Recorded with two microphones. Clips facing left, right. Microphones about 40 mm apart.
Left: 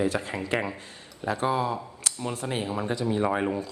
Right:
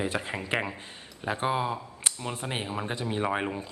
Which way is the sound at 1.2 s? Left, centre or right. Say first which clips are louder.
Left 2 dB; right.